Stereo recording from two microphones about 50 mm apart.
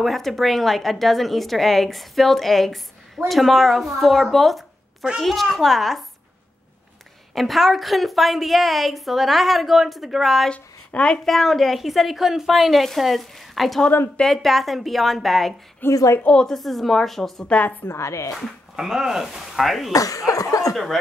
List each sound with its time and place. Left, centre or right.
0.0 s a woman's voice: centre
7.3 s a woman's voice: centre
10.5 s speech: left
11.2 s a woman's voice: centre
15.8 s a woman's voice: left
16.3 s speech: centre
16.5 s a woman's voice: centre
17.4 s a woman's voice: left
17.8 s a woman's voice: left
18.8 s a woman's voice: centre